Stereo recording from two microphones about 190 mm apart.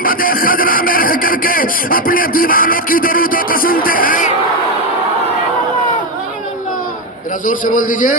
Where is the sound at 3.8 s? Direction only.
45° left (ahead or behind).